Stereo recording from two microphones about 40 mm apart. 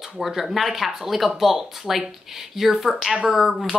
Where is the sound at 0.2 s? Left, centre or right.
Centre.